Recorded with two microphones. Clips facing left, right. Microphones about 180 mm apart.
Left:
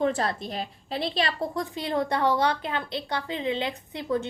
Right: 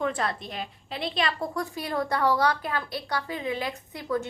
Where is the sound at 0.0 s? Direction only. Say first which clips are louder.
Left 3 dB; 35° left (ahead or behind).